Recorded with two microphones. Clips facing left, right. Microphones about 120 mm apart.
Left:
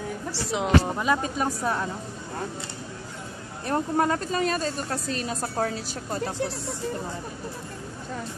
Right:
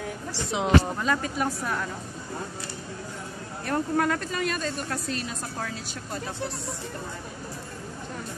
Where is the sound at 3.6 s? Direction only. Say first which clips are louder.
Left 1 dB; 25° left (ahead or behind).